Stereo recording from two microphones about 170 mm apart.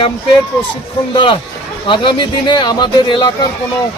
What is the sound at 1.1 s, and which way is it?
A man's voice, 25° left (ahead or behind).